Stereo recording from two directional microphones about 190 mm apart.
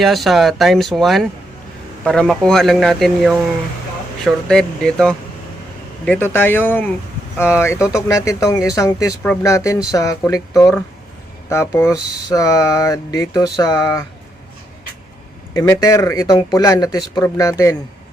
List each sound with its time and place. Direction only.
0.0 s speech: centre (ahead or behind); by 14.0 s 20° left (ahead or behind)
15.5 s speech: 20° left (ahead or behind)